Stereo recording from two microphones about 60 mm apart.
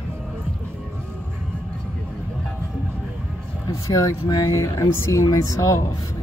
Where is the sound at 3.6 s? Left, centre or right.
Left.